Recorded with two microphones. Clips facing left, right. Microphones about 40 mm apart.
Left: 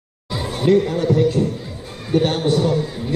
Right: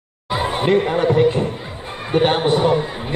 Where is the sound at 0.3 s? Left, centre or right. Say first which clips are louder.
Even; right.